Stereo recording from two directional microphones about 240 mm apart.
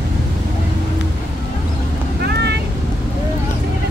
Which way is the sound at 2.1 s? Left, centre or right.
Right.